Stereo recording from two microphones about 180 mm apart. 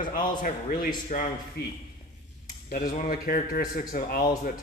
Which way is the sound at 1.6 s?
65° left (ahead or behind).